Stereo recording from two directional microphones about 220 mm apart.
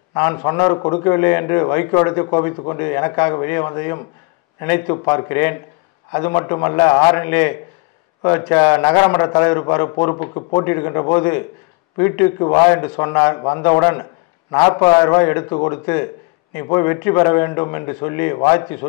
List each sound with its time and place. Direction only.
0.1 s a man's voice: 15° left (ahead or behind)
12.6 s a man's voice: 10° left (ahead or behind)